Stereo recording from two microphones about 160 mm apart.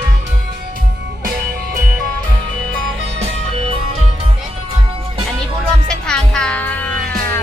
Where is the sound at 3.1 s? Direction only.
40° right (ahead or behind).